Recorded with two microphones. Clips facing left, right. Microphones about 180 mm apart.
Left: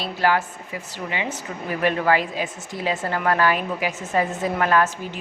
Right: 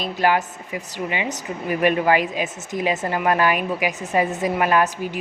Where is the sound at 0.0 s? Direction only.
15° right (ahead or behind).